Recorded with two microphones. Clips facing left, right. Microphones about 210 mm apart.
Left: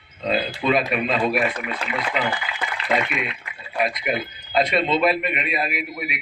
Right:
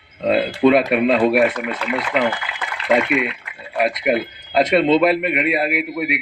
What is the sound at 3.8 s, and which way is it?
A man's voice, 60° right (ahead or behind).